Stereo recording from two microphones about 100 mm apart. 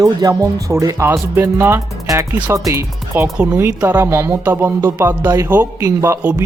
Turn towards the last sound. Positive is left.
turn(degrees=-15)  # may be behind; listen again after turning